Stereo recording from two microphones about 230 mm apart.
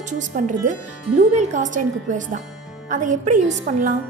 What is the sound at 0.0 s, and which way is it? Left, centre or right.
A woman's voice, right.